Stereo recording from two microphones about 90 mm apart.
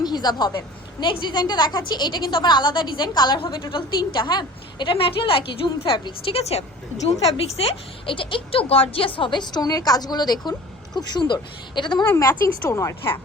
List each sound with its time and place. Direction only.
0.0 s a woman's voice: 50° left (ahead or behind); by 6.4 s 80° left
7.6 s a woman's voice: 85° left; by 12.0 s 60° left (ahead or behind)
12.0 s a woman's voice: 30° left (ahead or behind)